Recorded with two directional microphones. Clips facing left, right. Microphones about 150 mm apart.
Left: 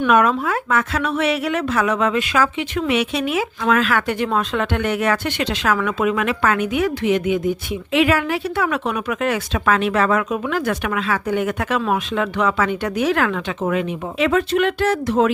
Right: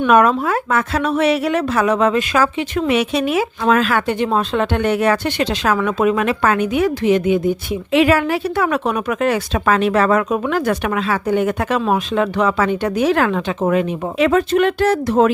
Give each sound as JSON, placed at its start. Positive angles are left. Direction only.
{"t": 0.1, "sound": "a woman's voice", "side_deg": -40}